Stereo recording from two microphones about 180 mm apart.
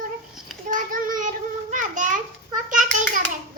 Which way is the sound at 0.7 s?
50° right (ahead or behind).